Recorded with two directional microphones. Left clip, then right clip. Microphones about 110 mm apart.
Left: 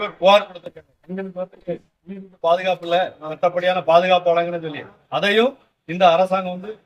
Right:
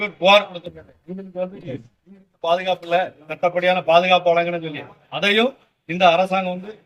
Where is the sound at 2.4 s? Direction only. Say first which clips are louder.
Left 2 dB; 25° left (ahead or behind).